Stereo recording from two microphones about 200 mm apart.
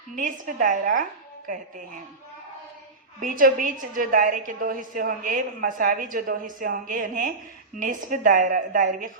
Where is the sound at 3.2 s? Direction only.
45° right (ahead or behind).